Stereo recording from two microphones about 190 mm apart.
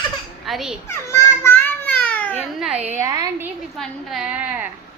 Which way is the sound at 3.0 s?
15° right (ahead or behind).